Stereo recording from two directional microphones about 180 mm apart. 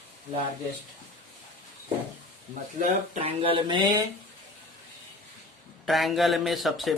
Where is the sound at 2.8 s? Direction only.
35° right (ahead or behind).